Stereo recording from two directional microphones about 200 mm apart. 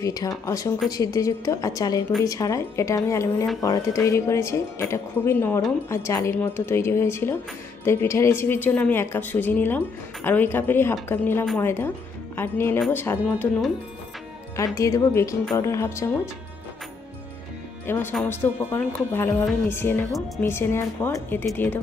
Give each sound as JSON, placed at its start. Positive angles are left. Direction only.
{"t": 0.0, "sound": "a woman's voice", "side_deg": 15}
{"t": 14.6, "sound": "a woman's voice", "side_deg": 15}
{"t": 17.8, "sound": "a woman's voice", "side_deg": 10}